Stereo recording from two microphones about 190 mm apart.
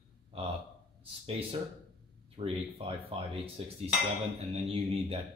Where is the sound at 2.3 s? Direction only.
30° right (ahead or behind).